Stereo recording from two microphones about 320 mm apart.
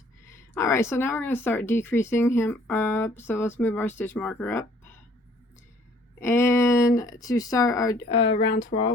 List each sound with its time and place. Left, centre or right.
0.3 s speech: centre
6.1 s speech: centre
8.2 s speech: left